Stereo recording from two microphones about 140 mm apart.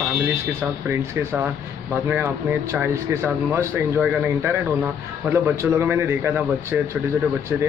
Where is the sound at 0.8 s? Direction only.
15° right (ahead or behind).